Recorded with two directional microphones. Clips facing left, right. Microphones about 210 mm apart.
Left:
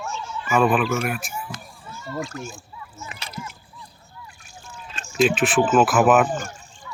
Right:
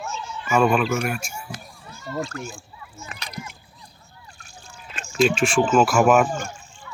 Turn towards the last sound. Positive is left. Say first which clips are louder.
# even
turn(degrees=0)  # may be behind; listen again after turning